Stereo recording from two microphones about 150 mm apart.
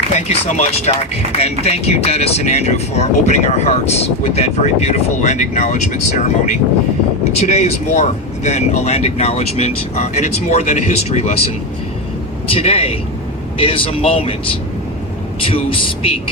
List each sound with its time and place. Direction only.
0.1 s speech: 50° left (ahead or behind)
12.5 s speech: 40° left (ahead or behind)